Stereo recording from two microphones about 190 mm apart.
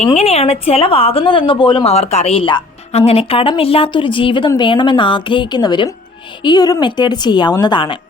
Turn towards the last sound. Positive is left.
turn(degrees=25)  # may be behind; listen again after turning